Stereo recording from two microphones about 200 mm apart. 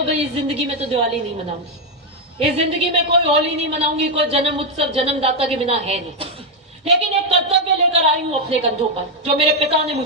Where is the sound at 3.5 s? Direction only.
30° right (ahead or behind).